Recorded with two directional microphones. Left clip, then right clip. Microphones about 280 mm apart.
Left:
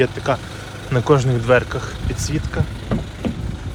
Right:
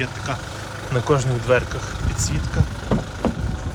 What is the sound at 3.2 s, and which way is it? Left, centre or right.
Vehicle, right.